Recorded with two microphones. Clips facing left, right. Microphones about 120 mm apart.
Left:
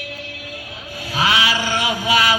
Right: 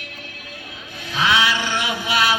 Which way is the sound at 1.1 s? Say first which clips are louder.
Even; 40° left (ahead or behind).